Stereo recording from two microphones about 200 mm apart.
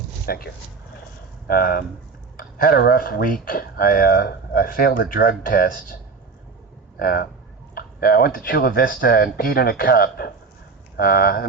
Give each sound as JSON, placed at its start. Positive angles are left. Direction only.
{"t": 0.3, "sound": "speech", "side_deg": 50}
{"t": 7.0, "sound": "speech", "side_deg": 45}